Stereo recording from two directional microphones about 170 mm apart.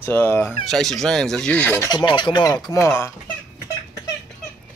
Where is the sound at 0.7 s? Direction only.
Centre (ahead or behind).